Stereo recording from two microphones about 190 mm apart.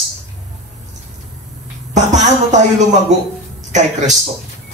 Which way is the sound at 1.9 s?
40° right (ahead or behind).